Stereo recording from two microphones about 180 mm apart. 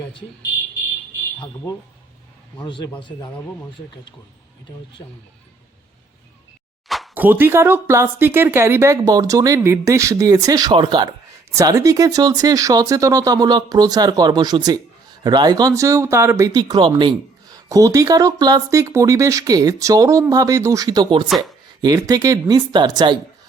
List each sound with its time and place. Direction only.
2.6 s speech: 25° left (ahead or behind)
6.8 s speech: centre (ahead or behind); by 21.2 s 25° right (ahead or behind)
21.2 s speech: centre (ahead or behind)
21.8 s speech: 20° right (ahead or behind)